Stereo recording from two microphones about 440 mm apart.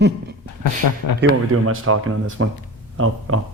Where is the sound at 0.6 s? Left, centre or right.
Left.